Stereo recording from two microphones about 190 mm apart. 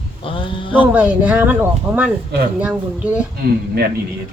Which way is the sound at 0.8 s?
10° right (ahead or behind).